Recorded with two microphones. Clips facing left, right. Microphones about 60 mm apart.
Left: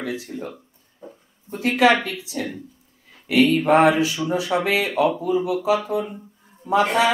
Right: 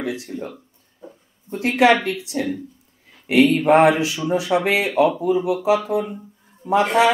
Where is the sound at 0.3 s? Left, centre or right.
Centre.